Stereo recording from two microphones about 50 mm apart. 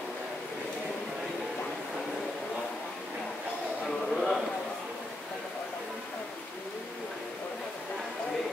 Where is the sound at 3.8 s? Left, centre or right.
Centre.